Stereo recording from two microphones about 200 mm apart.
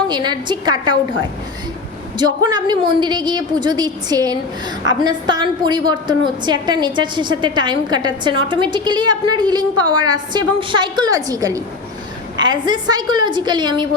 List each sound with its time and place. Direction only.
0.1 s a woman's voice: 20° right (ahead or behind)
2.1 s a woman's voice: 20° right (ahead or behind)